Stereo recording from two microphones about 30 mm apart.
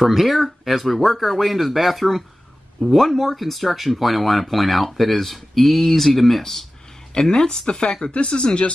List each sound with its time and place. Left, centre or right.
0.0 s speech: centre
7.2 s speech: left